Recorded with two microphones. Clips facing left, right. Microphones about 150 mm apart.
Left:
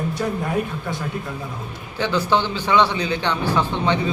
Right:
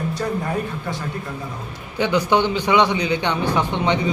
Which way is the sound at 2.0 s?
15° right (ahead or behind).